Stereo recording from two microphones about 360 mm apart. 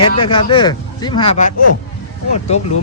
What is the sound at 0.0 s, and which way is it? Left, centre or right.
Speech, centre.